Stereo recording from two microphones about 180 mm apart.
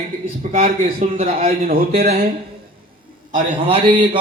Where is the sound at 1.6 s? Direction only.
55° right (ahead or behind).